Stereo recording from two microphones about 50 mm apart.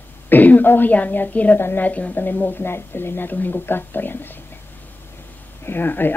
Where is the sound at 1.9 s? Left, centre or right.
Left.